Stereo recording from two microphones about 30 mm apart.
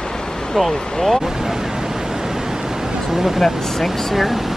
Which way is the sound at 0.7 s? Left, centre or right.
Left.